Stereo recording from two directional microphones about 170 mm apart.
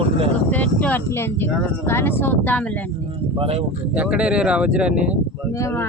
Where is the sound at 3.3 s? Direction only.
35° right (ahead or behind).